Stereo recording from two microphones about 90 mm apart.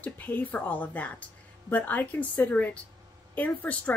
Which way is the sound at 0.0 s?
20° left (ahead or behind).